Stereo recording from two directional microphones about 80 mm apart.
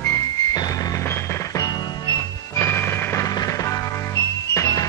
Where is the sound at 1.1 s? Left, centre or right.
Left.